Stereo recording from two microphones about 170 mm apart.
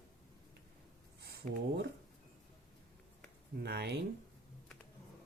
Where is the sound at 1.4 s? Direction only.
45° right (ahead or behind).